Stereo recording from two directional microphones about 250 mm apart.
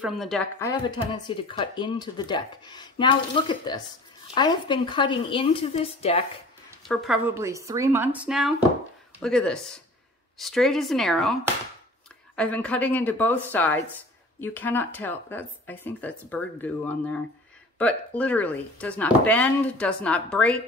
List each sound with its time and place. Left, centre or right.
0.0 s speech: centre
0.6 s speech: centre
6.9 s speech: centre
12.4 s speech: centre